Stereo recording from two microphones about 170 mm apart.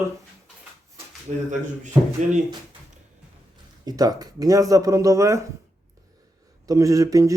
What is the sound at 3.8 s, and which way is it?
Speech, 20° right (ahead or behind).